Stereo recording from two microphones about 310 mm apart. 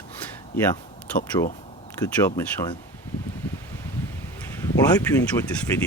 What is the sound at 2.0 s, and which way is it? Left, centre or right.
Speech, centre.